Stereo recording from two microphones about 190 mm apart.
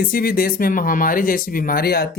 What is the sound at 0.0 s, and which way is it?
Speech, 50° left (ahead or behind).